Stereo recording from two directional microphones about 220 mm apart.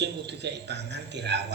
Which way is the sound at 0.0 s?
50° right (ahead or behind).